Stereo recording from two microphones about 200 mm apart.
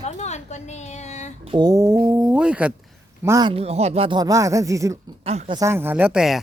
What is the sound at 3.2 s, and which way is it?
Speech, 15° right (ahead or behind).